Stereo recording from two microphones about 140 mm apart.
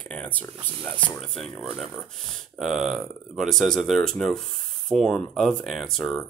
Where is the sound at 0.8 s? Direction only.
10° left (ahead or behind).